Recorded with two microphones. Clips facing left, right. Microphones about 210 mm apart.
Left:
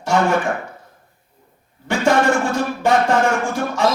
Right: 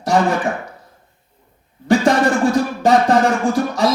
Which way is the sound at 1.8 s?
35° right (ahead or behind).